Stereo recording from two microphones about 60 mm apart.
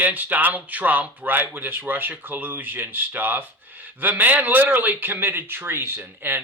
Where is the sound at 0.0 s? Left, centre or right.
Right.